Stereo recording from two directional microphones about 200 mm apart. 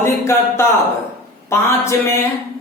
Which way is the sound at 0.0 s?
15° left (ahead or behind).